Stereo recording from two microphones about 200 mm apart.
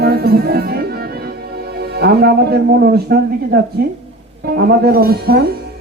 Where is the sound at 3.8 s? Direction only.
50° right (ahead or behind).